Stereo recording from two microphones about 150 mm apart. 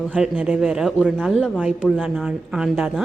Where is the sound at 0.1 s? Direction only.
10° right (ahead or behind).